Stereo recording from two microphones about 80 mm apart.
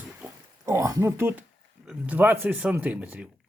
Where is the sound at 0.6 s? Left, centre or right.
Right.